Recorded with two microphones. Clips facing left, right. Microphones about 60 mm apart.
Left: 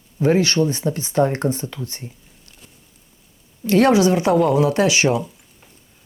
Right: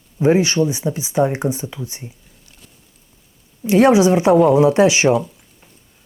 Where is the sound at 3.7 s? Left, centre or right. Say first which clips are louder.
Right 2 dB; centre.